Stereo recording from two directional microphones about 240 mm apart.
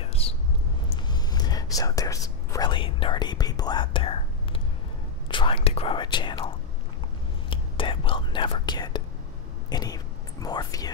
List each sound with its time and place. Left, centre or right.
0.0 s whispering: left